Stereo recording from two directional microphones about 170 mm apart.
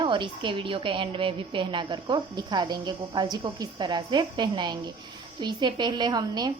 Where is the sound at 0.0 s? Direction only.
30° right (ahead or behind).